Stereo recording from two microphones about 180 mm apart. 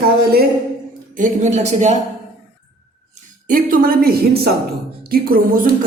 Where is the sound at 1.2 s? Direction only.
40° right (ahead or behind).